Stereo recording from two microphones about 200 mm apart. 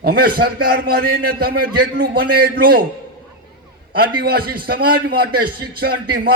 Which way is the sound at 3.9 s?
50° right (ahead or behind).